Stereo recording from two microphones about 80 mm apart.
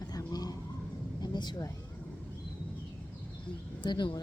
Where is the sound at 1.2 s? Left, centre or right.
Left.